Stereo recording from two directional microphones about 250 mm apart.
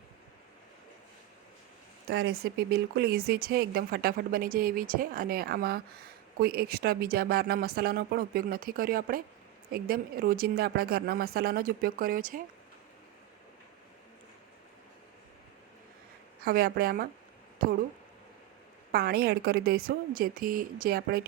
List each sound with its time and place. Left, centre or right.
2.0 s speech: right
16.4 s speech: right
18.9 s speech: right